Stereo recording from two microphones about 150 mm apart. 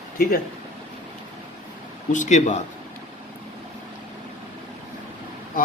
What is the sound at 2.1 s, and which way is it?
Speech, 55° left (ahead or behind).